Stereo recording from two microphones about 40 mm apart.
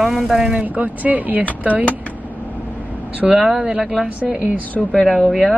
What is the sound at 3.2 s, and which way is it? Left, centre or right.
Speech, centre.